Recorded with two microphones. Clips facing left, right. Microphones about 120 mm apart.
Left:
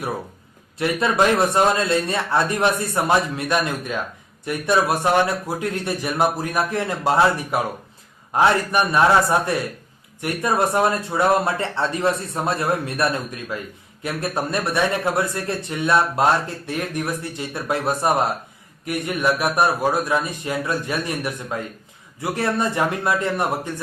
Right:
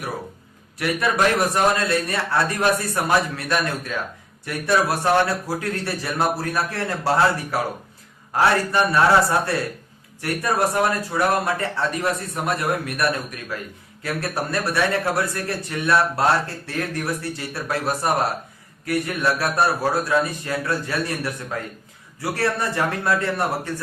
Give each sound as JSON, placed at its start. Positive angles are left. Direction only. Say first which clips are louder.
{"t": 0.8, "sound": "a man's voice", "louder": "left 2 dB", "side_deg": 25}